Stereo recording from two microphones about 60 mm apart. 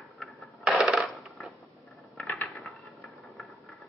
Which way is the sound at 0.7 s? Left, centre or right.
Centre.